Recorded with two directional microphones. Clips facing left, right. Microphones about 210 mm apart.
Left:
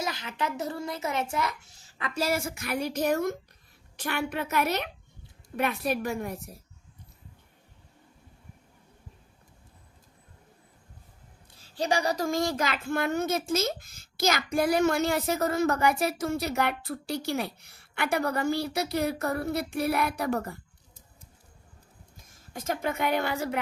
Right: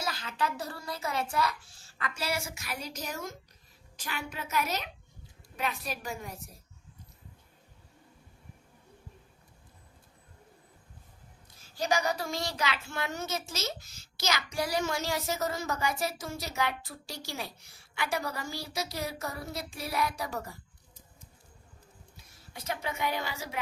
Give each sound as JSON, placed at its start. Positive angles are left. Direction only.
{"t": 0.0, "sound": "a child's voice", "side_deg": 20}
{"t": 2.1, "sound": "a child's voice", "side_deg": 50}
{"t": 11.5, "sound": "a child's voice", "side_deg": 30}
{"t": 22.2, "sound": "a woman's voice", "side_deg": 45}